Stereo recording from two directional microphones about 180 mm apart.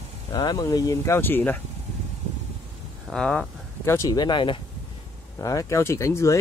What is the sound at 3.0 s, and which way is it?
Speech, 5° left (ahead or behind).